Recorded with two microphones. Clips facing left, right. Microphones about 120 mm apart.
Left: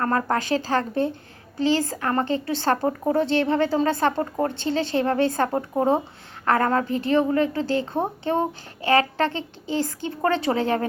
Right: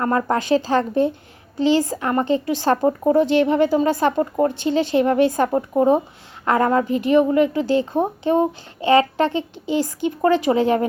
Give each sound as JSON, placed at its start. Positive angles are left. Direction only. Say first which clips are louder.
{"t": 0.0, "sound": "a woman's voice", "louder": "right 3 dB", "side_deg": -20}